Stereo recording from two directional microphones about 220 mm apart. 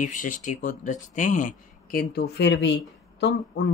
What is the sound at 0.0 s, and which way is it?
Speech, 35° left (ahead or behind).